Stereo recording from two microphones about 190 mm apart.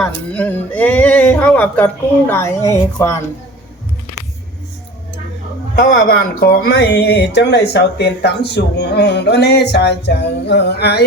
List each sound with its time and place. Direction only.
0.0 s speech: 5° left (ahead or behind)
5.8 s speech: 50° left (ahead or behind)